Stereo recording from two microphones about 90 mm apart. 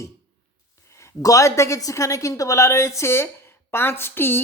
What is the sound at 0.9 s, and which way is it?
A woman's voice, 35° left (ahead or behind).